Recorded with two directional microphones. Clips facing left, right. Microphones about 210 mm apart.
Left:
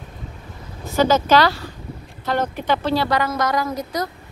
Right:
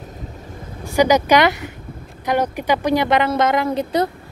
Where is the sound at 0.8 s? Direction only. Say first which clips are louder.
Right 2 dB; 15° right (ahead or behind).